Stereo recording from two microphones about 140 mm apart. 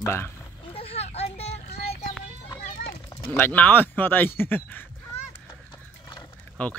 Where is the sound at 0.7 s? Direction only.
45° left (ahead or behind).